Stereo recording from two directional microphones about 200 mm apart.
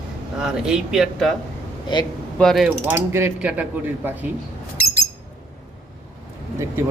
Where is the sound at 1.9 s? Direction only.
25° left (ahead or behind).